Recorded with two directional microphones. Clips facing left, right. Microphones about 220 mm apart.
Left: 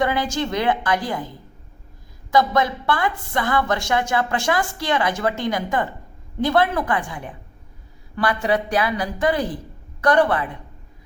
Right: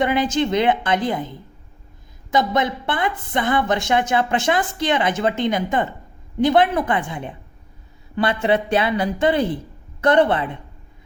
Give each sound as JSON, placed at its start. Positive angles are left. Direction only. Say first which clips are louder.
{"t": 0.0, "sound": "a woman's voice", "louder": "right 3 dB", "side_deg": -20}